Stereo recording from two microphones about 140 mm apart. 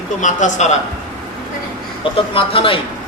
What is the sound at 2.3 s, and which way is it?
Speech, 40° left (ahead or behind).